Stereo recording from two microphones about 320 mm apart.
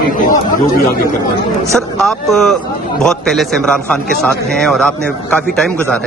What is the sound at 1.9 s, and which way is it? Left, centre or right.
A man's voice, centre.